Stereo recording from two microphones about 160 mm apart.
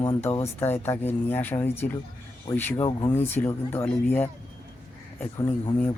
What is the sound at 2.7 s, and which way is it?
Speech, 35° left (ahead or behind).